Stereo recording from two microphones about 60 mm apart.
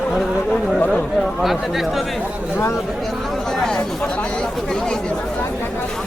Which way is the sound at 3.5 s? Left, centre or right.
Centre.